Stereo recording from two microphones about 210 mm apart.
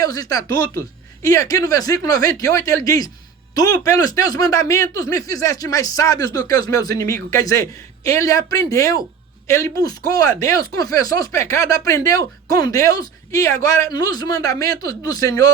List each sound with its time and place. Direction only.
0.0 s speech: 15° left (ahead or behind)